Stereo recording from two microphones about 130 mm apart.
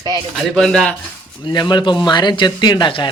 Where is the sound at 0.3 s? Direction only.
Centre (ahead or behind).